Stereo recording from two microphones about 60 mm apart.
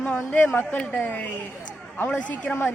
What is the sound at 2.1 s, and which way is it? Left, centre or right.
Speech, centre.